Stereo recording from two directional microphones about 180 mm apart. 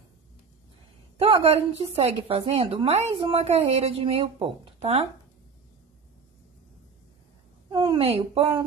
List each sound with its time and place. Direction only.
1.1 s speech: 30° right (ahead or behind)
7.7 s speech: 25° right (ahead or behind)